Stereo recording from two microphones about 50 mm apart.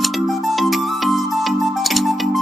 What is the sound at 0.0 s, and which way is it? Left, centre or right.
Music, centre.